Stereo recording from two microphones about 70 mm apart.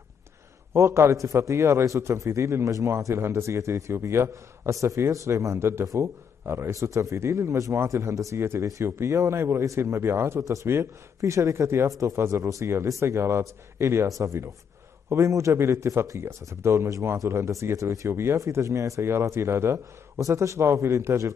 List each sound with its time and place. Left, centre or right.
0.7 s a man's voice: right